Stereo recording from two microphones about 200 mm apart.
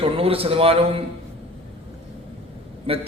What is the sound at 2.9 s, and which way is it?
Speech, 30° right (ahead or behind).